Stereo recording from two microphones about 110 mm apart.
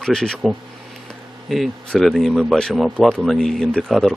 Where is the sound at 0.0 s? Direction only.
5° left (ahead or behind).